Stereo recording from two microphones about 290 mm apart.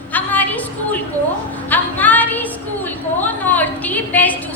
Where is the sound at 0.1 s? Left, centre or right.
Centre.